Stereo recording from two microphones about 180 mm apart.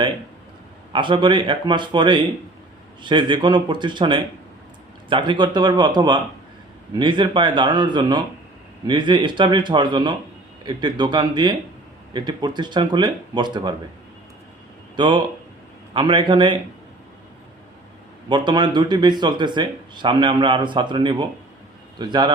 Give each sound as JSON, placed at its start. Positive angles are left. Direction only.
{"t": 0.9, "sound": "speech", "side_deg": -25}
{"t": 14.9, "sound": "speech", "side_deg": -25}
{"t": 18.3, "sound": "speech", "side_deg": -25}